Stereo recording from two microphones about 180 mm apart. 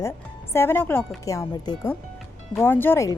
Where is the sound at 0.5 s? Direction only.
15° left (ahead or behind).